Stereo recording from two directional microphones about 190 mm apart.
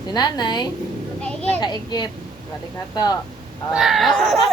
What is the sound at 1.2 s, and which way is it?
Speech, 5° left (ahead or behind).